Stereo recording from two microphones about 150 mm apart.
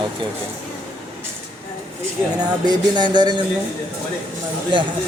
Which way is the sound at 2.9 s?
30° right (ahead or behind).